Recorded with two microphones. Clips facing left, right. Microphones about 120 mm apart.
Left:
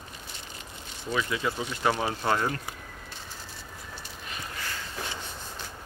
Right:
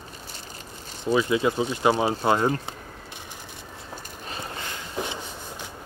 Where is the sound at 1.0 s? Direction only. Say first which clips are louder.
Right 8 dB; 25° right (ahead or behind).